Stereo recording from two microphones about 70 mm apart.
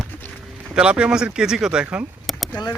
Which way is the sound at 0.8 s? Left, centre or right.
Centre.